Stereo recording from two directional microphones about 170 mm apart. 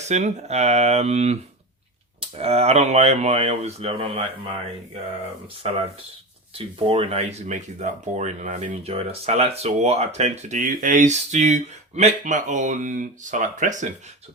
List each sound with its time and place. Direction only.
0.1 s speech: 40° right (ahead or behind)
5.6 s speech: 35° right (ahead or behind)